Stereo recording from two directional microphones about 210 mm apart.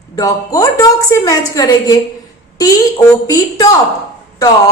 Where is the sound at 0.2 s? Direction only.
15° left (ahead or behind).